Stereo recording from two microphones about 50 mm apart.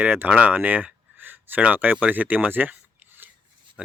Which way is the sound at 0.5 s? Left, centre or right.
Right.